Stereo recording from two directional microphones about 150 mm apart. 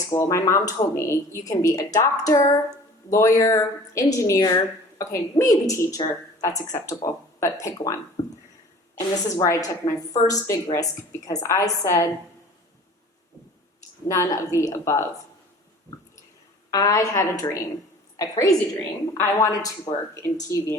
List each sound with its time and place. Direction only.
0.1 s a woman's voice: 20° left (ahead or behind)
8.2 s a sound: 50° left (ahead or behind)
9.0 s a woman's voice: 20° left (ahead or behind)
14.1 s a woman's voice: 20° left (ahead or behind)
16.7 s a woman's voice: 25° left (ahead or behind)